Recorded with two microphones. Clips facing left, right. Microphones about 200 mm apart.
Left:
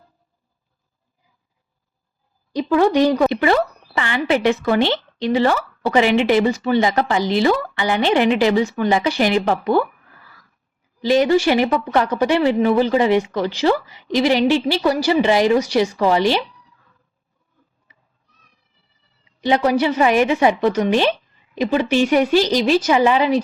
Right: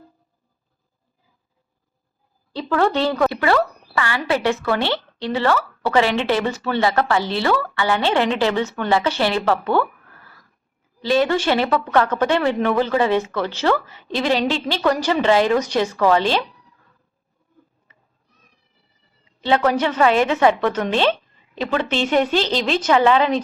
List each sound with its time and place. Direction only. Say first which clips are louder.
2.5 s a woman's voice: left 4 dB; 15° left (ahead or behind)
11.0 s a woman's voice: left 3 dB; 15° left (ahead or behind)
19.4 s a woman's voice: left 2 dB; 15° left (ahead or behind)